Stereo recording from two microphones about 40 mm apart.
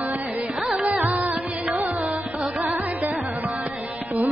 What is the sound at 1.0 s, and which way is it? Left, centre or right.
Carnatic music, right.